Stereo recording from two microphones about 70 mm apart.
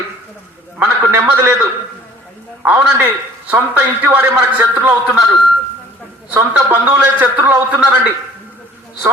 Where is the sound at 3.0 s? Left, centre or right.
Right.